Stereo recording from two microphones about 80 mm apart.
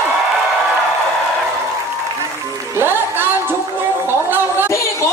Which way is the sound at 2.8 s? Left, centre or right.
Right.